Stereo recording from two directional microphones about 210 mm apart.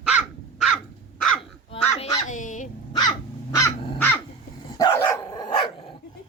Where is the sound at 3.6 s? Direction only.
10° left (ahead or behind).